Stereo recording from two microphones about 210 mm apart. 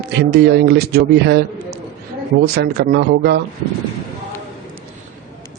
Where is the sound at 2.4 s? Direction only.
50° right (ahead or behind).